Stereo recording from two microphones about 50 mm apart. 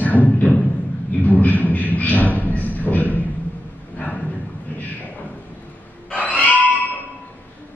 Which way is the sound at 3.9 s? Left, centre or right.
Left.